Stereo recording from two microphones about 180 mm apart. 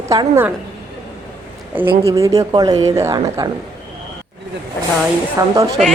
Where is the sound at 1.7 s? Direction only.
10° right (ahead or behind).